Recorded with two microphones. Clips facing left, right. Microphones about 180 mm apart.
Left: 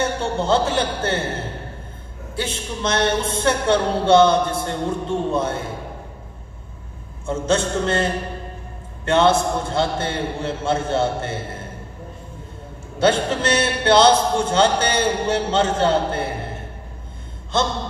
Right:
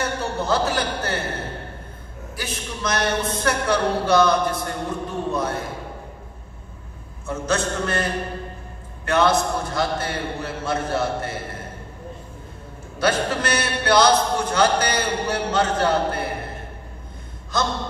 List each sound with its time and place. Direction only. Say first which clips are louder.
0.0 s a man's voice: left 3 dB; 25° left (ahead or behind)
2.3 s a man's voice: left 5 dB; 25° left (ahead or behind)
7.2 s a man's voice: left 3 dB; 25° left (ahead or behind)
13.0 s a man's voice: left 3 dB; 25° left (ahead or behind)
17.5 s a man's voice: left 3 dB; 25° left (ahead or behind)